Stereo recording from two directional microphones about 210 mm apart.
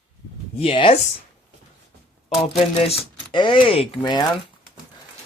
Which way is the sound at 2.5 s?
30° left (ahead or behind).